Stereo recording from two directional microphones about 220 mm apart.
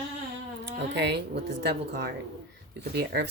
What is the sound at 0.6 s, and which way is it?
Speech, 50° right (ahead or behind).